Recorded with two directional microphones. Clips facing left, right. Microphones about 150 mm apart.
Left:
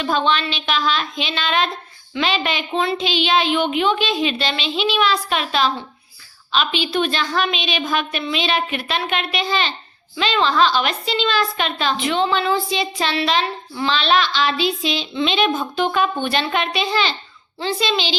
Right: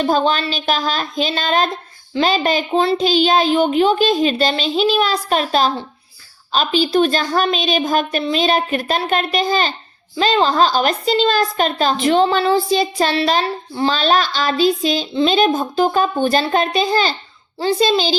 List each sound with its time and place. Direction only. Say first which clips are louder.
0.0 s a woman's voice: right 3 dB; 40° right (ahead or behind)